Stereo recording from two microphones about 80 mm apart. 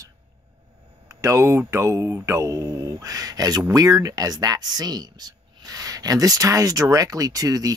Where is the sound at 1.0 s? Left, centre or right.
Right.